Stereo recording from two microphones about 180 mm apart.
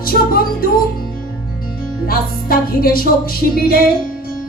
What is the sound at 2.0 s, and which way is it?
Music, 55° left (ahead or behind).